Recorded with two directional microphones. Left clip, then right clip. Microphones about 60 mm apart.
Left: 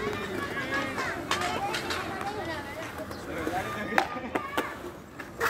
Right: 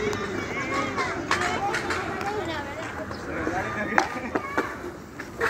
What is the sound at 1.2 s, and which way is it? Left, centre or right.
Run, left.